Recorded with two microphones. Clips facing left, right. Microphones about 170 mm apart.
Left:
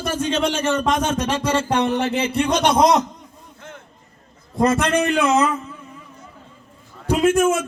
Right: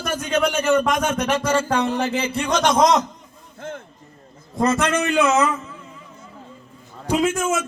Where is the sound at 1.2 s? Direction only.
30° left (ahead or behind).